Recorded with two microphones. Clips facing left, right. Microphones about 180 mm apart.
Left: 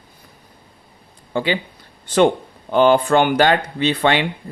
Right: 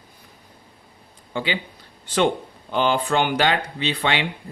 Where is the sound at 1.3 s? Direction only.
45° left (ahead or behind).